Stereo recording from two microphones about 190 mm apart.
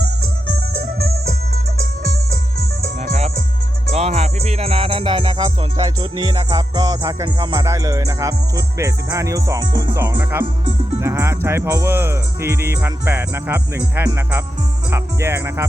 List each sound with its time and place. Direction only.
3.0 s music: 35° right (ahead or behind); by 10.4 s 15° right (ahead or behind)
11.0 s speech: 15° right (ahead or behind)
14.8 s music: 15° right (ahead or behind)